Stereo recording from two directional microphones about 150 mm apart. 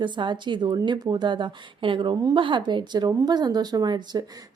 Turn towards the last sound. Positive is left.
turn(degrees=-30)  # may be behind; listen again after turning